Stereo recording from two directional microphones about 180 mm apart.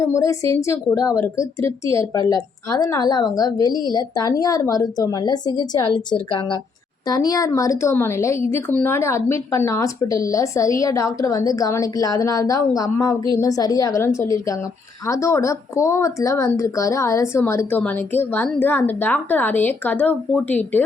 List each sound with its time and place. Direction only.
0.0 s a woman's voice: 15° left (ahead or behind)